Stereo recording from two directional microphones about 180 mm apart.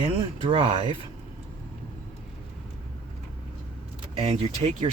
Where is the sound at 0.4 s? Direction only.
30° right (ahead or behind).